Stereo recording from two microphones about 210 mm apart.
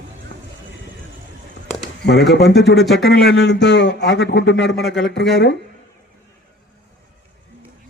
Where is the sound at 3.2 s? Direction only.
55° left (ahead or behind).